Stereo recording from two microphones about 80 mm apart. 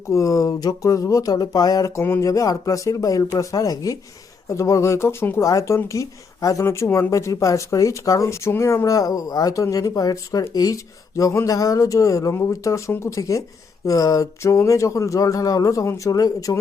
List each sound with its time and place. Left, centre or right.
0.1 s speech: left
2.0 s a sound: left
2.2 s speech: left
5.4 s speech: left